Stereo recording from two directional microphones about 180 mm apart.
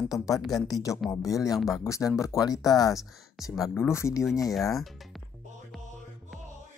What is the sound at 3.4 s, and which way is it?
Speech, centre (ahead or behind).